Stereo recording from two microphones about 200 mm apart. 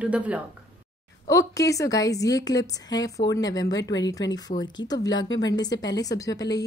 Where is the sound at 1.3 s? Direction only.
15° left (ahead or behind).